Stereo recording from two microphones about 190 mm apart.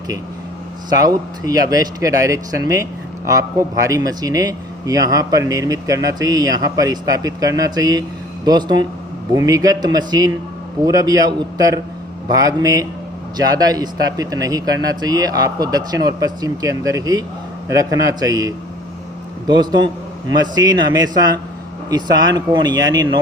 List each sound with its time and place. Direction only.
0.9 s a man's voice: 20° right (ahead or behind)